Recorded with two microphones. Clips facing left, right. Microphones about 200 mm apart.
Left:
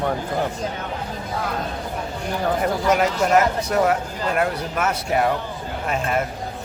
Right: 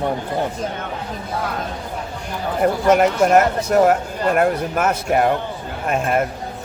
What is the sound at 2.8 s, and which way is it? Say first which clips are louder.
Speech: right 5 dB; 50° right (ahead or behind).